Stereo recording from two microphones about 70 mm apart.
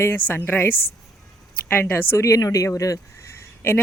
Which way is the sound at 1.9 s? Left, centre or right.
Left.